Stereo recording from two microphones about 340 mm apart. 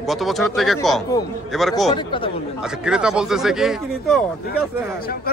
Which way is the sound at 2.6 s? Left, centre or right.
Centre.